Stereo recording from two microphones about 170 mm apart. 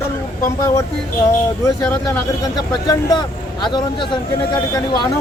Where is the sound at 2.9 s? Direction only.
25° left (ahead or behind).